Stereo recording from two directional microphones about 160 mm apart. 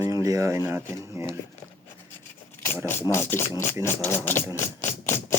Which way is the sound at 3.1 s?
15° left (ahead or behind).